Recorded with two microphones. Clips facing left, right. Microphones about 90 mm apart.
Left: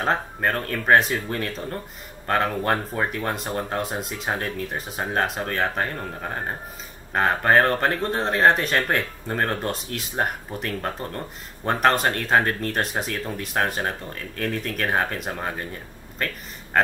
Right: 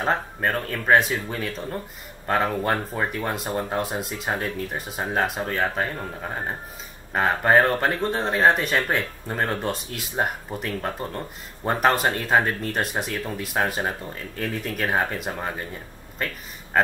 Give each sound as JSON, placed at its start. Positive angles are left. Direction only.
{"t": 0.0, "sound": "speech", "side_deg": 0}